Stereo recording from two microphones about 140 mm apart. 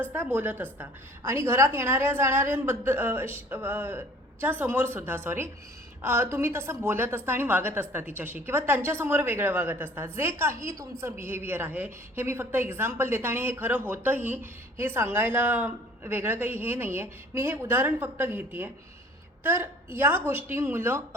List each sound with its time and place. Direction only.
0.1 s a woman's voice: 15° right (ahead or behind)